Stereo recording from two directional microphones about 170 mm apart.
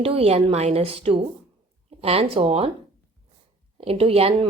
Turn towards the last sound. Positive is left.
turn(degrees=-35)  # may be behind; listen again after turning